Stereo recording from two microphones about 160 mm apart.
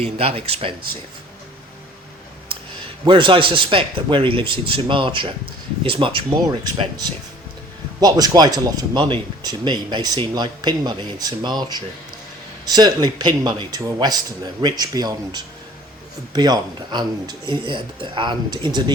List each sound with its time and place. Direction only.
0.0 s a man's voice: 35° right (ahead or behind)
3.0 s a man's voice: 30° right (ahead or behind)
8.0 s speech: 25° right (ahead or behind)